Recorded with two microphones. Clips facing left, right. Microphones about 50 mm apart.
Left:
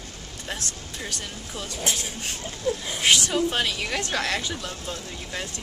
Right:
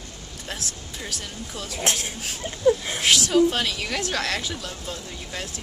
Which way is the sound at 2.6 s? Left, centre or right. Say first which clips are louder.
Right 7 dB; right.